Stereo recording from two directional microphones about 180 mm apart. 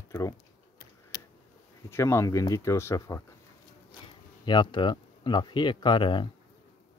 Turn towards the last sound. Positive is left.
turn(degrees=25)  # may be behind; listen again after turning